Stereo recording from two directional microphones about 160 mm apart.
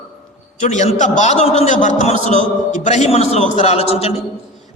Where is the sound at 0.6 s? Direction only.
50° left (ahead or behind).